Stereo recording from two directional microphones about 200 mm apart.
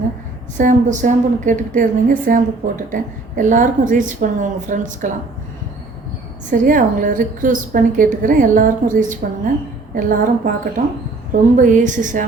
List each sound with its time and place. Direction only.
0.5 s a woman's voice: 40° right (ahead or behind)
6.5 s a woman's voice: 40° right (ahead or behind)